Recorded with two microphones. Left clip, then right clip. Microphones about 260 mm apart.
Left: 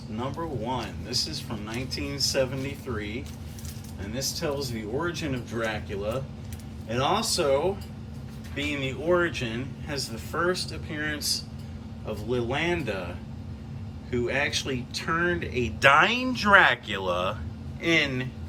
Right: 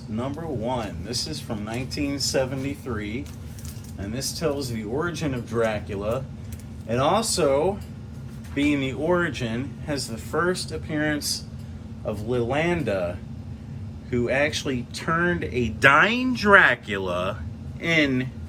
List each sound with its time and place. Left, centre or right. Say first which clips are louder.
0.2 s speech: right 2 dB; centre
8.7 s speech: left 1 dB; centre